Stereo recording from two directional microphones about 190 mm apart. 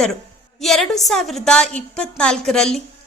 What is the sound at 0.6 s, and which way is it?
A woman's voice, centre (ahead or behind).